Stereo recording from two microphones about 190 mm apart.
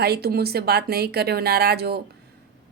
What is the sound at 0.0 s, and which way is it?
Speech, 55° right (ahead or behind).